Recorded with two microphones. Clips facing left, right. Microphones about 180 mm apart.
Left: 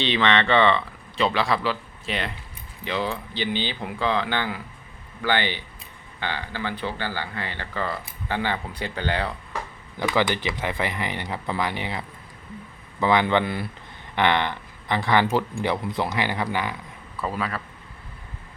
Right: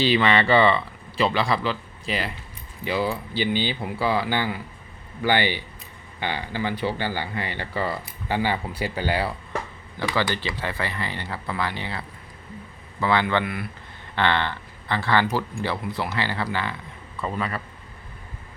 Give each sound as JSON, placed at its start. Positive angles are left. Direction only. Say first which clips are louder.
{"t": 0.0, "sound": "speech", "louder": "right 2 dB", "side_deg": -5}
{"t": 10.0, "sound": "a man's voice", "louder": "left 2 dB", "side_deg": 15}
{"t": 14.2, "sound": "speech", "louder": "left 1 dB", "side_deg": 15}
{"t": 17.2, "sound": "speech", "louder": "even", "side_deg": 5}